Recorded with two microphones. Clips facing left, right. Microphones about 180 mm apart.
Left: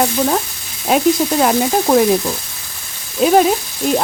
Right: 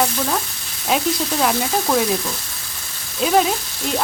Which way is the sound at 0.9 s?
50° left (ahead or behind).